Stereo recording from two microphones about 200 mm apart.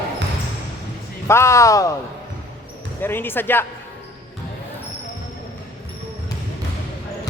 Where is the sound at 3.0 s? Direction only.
10° left (ahead or behind).